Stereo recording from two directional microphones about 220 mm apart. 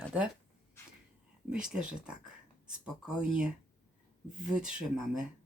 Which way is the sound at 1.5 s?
5° right (ahead or behind).